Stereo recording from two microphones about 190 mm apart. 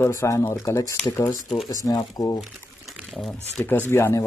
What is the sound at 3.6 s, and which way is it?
Speech, 10° left (ahead or behind).